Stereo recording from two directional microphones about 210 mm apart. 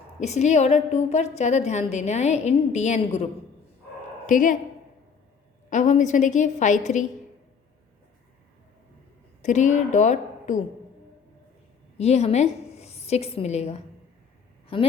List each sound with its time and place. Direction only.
0.2 s a woman's voice: 35° left (ahead or behind)
4.3 s a woman's voice: 40° left (ahead or behind)
5.7 s a woman's voice: 35° left (ahead or behind)
9.4 s a woman's voice: 35° left (ahead or behind)
11.9 s a woman's voice: 30° left (ahead or behind)